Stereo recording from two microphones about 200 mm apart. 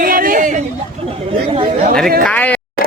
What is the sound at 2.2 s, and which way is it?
Speech, 5° left (ahead or behind).